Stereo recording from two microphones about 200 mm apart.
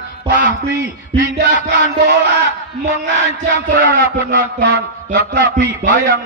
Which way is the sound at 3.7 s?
65° right (ahead or behind).